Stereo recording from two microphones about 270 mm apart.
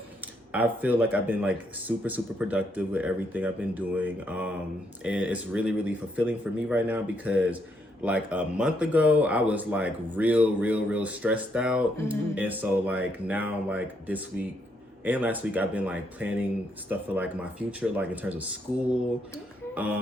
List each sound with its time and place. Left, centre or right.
0.5 s speech: centre
19.7 s speech: centre